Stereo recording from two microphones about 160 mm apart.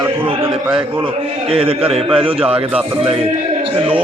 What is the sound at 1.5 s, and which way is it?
Speech, 35° right (ahead or behind).